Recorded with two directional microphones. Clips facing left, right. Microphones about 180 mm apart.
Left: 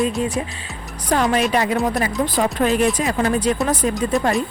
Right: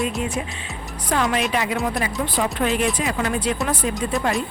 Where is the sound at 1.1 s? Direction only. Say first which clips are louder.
Left 4 dB; 40° left (ahead or behind).